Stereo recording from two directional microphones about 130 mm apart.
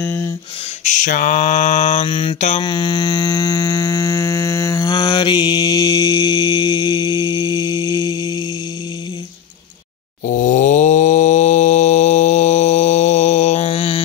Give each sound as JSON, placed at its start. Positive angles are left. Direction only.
{"t": 0.0, "sound": "speech", "side_deg": 15}
{"t": 0.8, "sound": "mantra", "side_deg": 70}
{"t": 2.0, "sound": "mantra", "side_deg": 40}
{"t": 2.6, "sound": "a sound", "side_deg": 35}
{"t": 7.3, "sound": "mantra", "side_deg": 30}
{"t": 8.1, "sound": "mantra", "side_deg": -30}
{"t": 10.3, "sound": "mantra", "side_deg": 75}